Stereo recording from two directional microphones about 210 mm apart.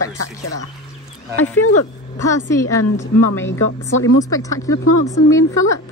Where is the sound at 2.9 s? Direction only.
60° left (ahead or behind).